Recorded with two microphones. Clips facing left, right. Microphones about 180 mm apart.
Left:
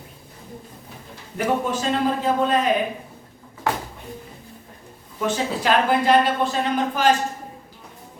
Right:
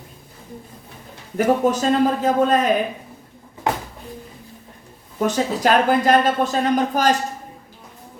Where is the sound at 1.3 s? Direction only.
40° right (ahead or behind).